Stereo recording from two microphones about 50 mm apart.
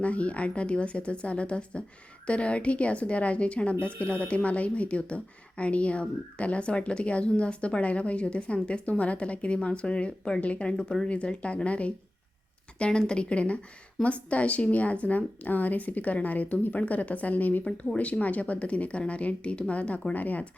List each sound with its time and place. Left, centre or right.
0.0 s a woman's voice: left